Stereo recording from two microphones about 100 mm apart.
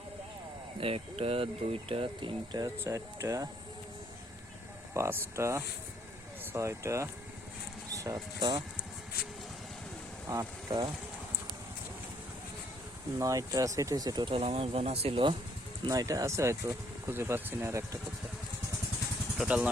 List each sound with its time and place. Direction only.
0.8 s speech: 80° right
2.5 s speech: 40° right (ahead or behind)
2.7 s speech: 25° right (ahead or behind)
4.9 s speech: 25° right (ahead or behind)
10.2 s speech: 40° right (ahead or behind)
13.1 s speech: 35° right (ahead or behind)
14.3 s speech: 75° right (ahead or behind)
15.9 s speech: 35° right (ahead or behind)
19.5 s speech: 10° right (ahead or behind)